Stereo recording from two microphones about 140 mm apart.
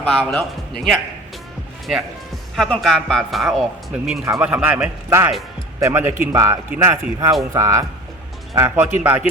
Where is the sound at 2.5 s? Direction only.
Centre (ahead or behind).